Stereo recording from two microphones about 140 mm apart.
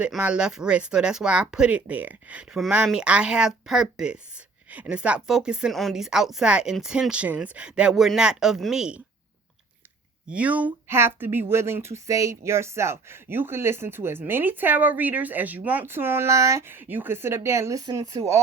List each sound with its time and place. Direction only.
0.0 s speech: 10° right (ahead or behind)
10.2 s speech: 10° right (ahead or behind)